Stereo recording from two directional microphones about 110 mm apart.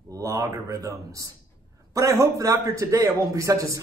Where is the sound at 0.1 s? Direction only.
30° right (ahead or behind).